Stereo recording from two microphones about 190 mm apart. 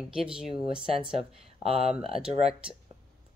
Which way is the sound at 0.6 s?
25° right (ahead or behind).